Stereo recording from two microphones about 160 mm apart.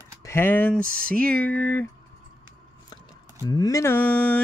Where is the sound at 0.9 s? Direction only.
65° right (ahead or behind).